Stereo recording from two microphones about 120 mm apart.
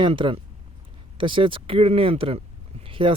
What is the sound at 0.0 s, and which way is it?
Speech, 45° right (ahead or behind).